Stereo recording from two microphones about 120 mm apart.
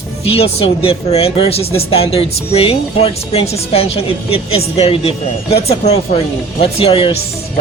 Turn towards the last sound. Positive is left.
turn(degrees=50)  # may be behind; listen again after turning